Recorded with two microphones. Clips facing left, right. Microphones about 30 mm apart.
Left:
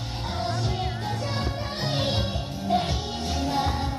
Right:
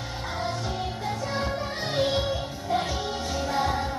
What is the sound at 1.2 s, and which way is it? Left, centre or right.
Music, left.